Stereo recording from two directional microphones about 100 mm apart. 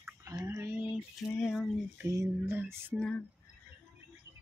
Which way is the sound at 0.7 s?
20° right (ahead or behind).